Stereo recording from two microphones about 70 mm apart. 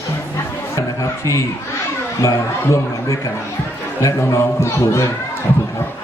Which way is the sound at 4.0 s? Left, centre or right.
Left.